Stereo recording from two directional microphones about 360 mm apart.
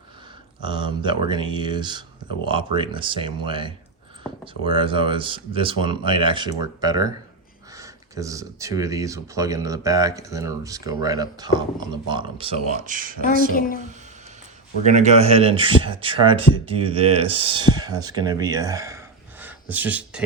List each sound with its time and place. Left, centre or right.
0.6 s speech: centre
13.5 s a woman's voice: left
14.8 s speech: centre